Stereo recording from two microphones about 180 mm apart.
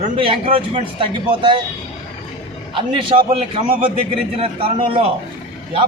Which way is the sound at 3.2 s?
30° right (ahead or behind).